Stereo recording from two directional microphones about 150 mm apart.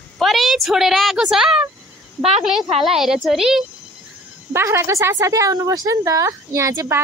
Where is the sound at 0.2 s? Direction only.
Centre (ahead or behind).